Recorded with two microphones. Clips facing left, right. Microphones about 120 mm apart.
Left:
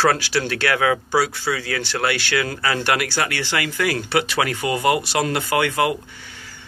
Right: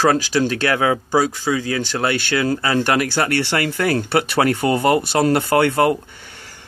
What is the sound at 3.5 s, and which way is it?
Speech, 40° right (ahead or behind).